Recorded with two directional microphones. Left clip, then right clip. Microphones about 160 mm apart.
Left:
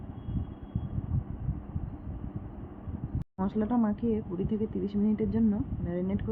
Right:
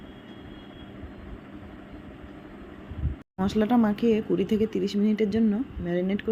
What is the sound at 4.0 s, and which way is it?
Speech, 25° right (ahead or behind).